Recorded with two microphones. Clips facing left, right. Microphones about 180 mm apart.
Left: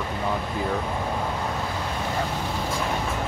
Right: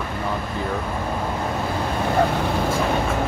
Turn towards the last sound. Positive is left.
turn(degrees=-65)  # may be behind; listen again after turning